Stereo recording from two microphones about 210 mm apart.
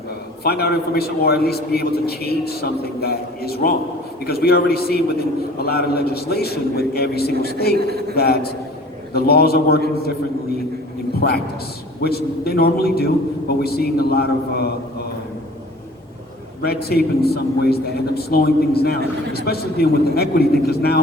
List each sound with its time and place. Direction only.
0.4 s a man's voice: 50° left (ahead or behind)
11.2 s a man's voice: 50° left (ahead or behind)
16.6 s a man's voice: 50° left (ahead or behind)